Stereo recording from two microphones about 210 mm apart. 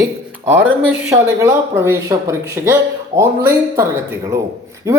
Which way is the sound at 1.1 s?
15° right (ahead or behind).